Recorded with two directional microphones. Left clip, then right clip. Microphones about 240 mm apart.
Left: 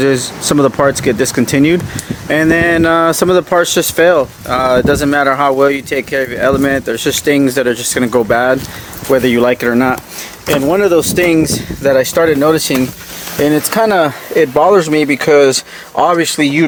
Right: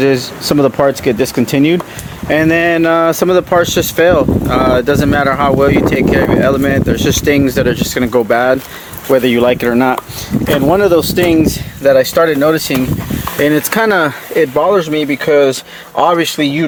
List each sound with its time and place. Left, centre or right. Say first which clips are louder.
0.0 s speech: right 1 dB; centre
13.4 s speech: even; centre